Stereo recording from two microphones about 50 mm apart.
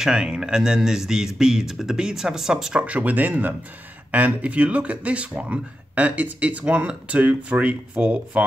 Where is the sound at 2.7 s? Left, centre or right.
Right.